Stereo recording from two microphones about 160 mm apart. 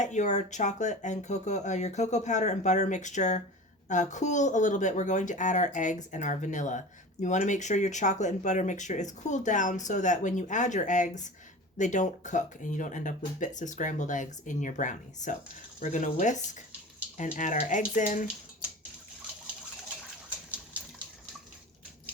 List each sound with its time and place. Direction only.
0.0 s speech: 50° left (ahead or behind)